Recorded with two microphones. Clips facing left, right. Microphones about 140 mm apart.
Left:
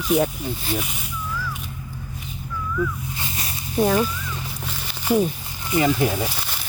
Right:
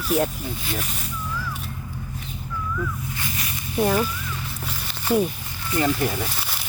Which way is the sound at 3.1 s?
25° left (ahead or behind).